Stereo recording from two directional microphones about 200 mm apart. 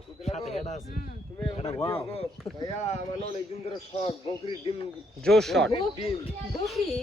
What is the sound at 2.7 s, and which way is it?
A man's voice, 35° left (ahead or behind).